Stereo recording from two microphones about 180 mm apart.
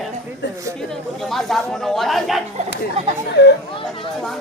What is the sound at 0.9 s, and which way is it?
Speech, centre (ahead or behind).